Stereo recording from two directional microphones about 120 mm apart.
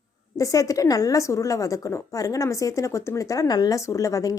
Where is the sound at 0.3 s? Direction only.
25° left (ahead or behind).